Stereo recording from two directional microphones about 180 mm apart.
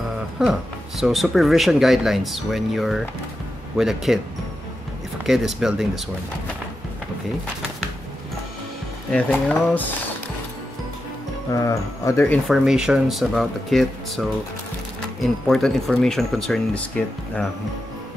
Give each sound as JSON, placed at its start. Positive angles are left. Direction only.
{"t": 0.4, "sound": "speech", "side_deg": 0}
{"t": 5.2, "sound": "speech", "side_deg": 0}
{"t": 9.1, "sound": "speech", "side_deg": 5}
{"t": 11.5, "sound": "speech", "side_deg": 15}
{"t": 12.4, "sound": "speech", "side_deg": 0}
{"t": 15.4, "sound": "speech", "side_deg": 0}